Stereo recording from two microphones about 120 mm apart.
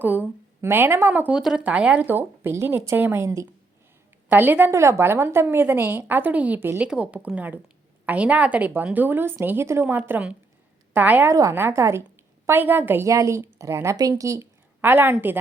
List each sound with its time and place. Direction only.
0.0 s speech: 15° right (ahead or behind)
1.4 s a woman's voice: 5° right (ahead or behind)